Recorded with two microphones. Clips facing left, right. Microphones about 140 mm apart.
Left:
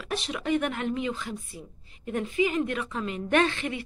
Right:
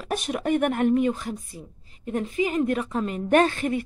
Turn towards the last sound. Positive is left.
turn(degrees=-45)  # may be behind; listen again after turning